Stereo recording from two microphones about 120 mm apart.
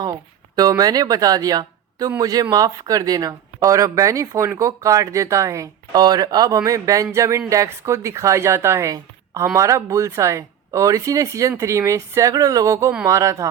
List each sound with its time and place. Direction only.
0.0 s speech: 30° right (ahead or behind)